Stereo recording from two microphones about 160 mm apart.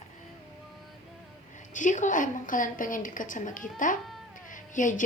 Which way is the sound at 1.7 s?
50° left (ahead or behind).